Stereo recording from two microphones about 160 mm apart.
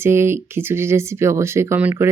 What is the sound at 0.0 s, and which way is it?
Speech, 15° right (ahead or behind).